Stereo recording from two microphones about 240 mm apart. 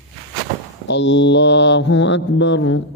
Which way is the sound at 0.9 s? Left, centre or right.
Left.